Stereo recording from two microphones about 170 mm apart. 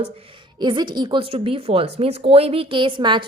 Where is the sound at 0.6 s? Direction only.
25° right (ahead or behind).